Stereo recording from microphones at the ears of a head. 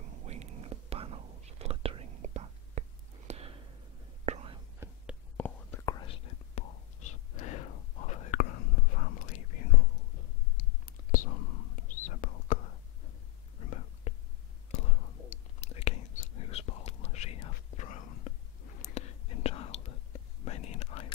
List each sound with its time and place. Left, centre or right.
0.0 s whispering: right
5.4 s whispering: left